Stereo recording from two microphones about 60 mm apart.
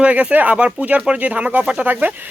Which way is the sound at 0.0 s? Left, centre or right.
Right.